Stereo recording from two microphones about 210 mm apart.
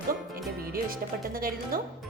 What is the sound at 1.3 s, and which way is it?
Speech, 45° right (ahead or behind).